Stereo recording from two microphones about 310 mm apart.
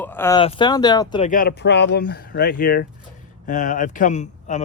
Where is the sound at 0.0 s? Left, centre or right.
Centre.